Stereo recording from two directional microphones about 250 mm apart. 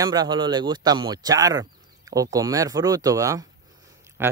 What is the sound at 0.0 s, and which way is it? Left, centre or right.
Speech, centre.